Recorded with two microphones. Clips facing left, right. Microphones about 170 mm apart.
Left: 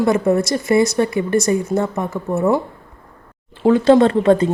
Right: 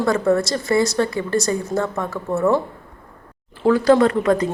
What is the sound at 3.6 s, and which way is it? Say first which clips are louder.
Speech: left 3 dB; 25° left (ahead or behind).